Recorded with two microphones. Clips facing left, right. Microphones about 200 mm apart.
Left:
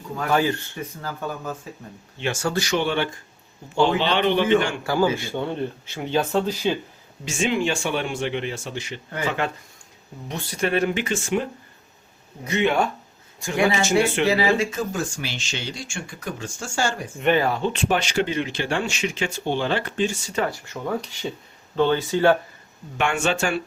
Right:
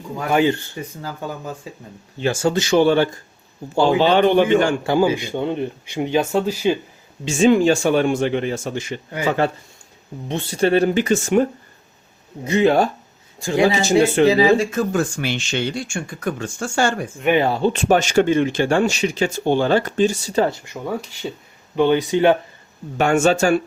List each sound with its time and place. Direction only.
0.2 s speech: 15° right (ahead or behind)
2.1 s speech: 35° right (ahead or behind)
2.7 s speech: 40° right (ahead or behind)
4.8 s speech: 20° right (ahead or behind)
7.3 s speech: 35° right (ahead or behind)
9.4 s speech: 35° right (ahead or behind)
12.5 s speech: 35° right (ahead or behind)
14.3 s speech: 20° right (ahead or behind)
14.7 s speech: 60° right (ahead or behind)
17.4 s speech: 30° right (ahead or behind)
17.7 s speech: 45° right (ahead or behind)
20.5 s speech: 15° right (ahead or behind)
23.0 s speech: 40° right (ahead or behind)